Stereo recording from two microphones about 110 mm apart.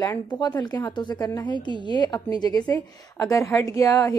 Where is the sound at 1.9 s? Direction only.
40° left (ahead or behind).